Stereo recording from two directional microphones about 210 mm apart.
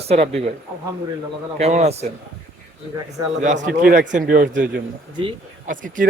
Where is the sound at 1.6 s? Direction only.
30° right (ahead or behind).